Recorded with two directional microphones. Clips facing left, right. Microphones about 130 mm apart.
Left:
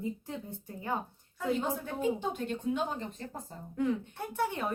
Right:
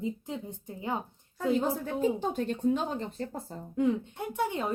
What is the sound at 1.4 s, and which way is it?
A woman's voice, 35° right (ahead or behind).